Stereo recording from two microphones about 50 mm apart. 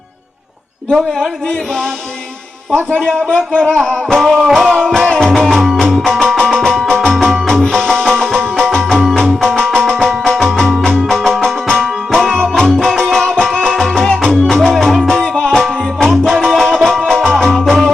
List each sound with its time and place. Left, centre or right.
3.0 s music: centre
3.2 s speech: centre
3.6 s music: centre
6.3 s music: centre